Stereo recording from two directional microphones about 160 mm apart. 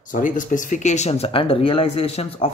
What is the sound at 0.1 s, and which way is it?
Speech, 55° left (ahead or behind).